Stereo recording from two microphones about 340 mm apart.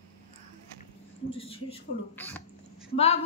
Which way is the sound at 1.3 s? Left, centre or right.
Centre.